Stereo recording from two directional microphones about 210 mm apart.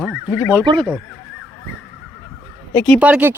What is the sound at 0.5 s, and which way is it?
Speech, 20° right (ahead or behind).